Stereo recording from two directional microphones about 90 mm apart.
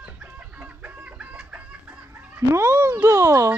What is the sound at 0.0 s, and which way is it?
Chicken, 15° right (ahead or behind).